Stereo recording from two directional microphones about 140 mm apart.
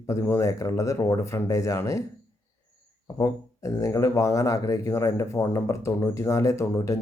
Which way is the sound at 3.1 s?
25° left (ahead or behind).